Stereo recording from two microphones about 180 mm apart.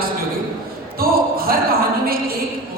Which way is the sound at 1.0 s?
55° right (ahead or behind).